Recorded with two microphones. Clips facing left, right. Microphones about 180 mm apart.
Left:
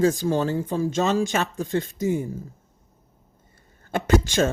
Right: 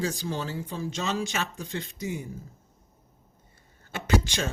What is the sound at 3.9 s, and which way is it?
Speech, 50° left (ahead or behind).